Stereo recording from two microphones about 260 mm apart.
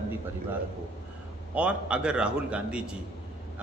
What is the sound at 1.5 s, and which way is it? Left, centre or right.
A man's voice, centre.